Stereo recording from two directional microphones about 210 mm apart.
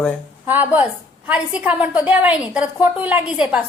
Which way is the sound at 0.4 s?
10° right (ahead or behind).